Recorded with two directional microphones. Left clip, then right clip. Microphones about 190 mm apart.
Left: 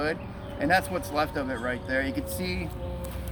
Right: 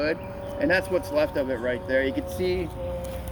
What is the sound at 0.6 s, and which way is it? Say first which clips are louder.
Speech: right 2 dB; 55° left (ahead or behind).